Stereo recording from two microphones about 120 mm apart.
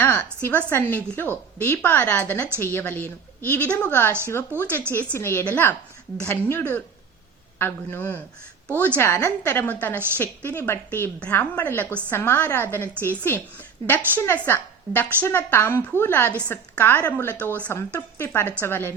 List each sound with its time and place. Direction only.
0.0 s a sound: 15° left (ahead or behind)
0.7 s a woman's voice: 15° left (ahead or behind)
14.4 s a woman's voice: 15° left (ahead or behind)